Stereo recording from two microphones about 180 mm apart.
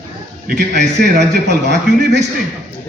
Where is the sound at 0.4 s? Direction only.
65° right (ahead or behind).